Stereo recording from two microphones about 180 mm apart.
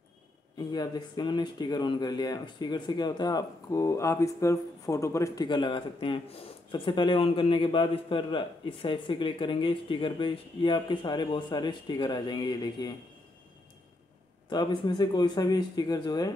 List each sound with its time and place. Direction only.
0.6 s speech: 25° left (ahead or behind)
14.5 s speech: 25° left (ahead or behind)